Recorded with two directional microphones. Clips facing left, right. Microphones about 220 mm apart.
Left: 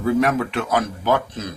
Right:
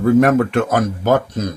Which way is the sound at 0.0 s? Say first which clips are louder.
Right 7 dB; 50° right (ahead or behind).